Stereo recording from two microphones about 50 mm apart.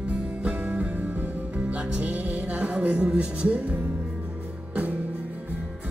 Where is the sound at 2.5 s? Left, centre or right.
Right.